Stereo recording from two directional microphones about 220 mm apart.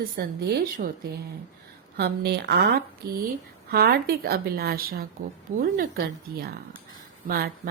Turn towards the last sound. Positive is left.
turn(degrees=-40)  # may be behind; listen again after turning